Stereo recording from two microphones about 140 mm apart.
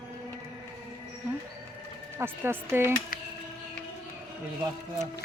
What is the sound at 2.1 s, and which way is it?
Speech, 15° right (ahead or behind).